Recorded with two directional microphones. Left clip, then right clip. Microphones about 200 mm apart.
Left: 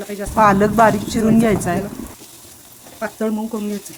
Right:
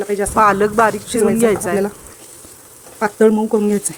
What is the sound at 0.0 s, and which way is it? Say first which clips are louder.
Speech: right 9 dB; 30° right (ahead or behind).